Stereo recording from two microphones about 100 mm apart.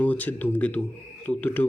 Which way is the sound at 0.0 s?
15° left (ahead or behind).